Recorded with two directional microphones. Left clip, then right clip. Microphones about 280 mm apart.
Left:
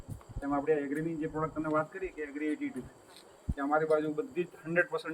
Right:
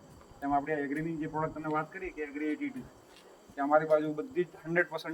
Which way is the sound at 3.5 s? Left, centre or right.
Right.